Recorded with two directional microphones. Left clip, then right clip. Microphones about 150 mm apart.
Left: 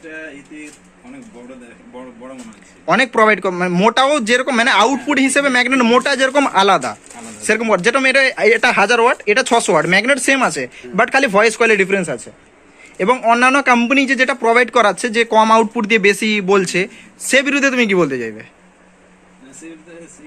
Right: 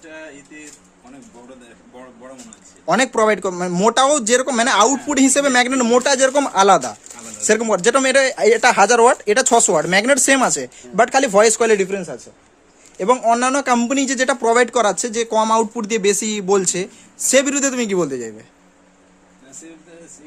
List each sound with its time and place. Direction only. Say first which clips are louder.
2.8 s speech: left 3 dB; 20° right (ahead or behind)
11.8 s a man's voice: left 6 dB; 5° left (ahead or behind)
13.0 s a man's voice: left 3 dB; 15° right (ahead or behind)